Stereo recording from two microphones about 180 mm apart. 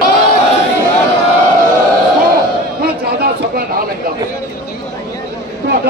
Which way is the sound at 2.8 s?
60° right (ahead or behind).